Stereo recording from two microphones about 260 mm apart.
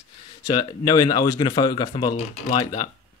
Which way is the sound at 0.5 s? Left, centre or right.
Centre.